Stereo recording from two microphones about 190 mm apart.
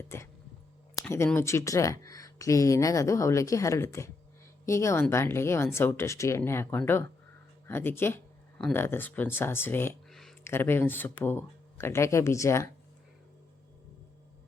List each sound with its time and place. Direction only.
0.1 s speech: 15° left (ahead or behind)
10.1 s a sound: centre (ahead or behind)
10.4 s speech: 10° left (ahead or behind)